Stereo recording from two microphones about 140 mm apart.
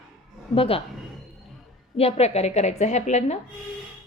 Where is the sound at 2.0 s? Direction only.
45° left (ahead or behind).